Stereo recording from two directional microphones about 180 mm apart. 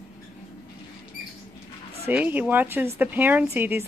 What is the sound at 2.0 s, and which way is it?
Speech, 10° right (ahead or behind).